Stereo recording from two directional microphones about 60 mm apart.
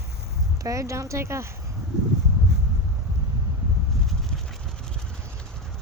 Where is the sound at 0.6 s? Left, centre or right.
Right.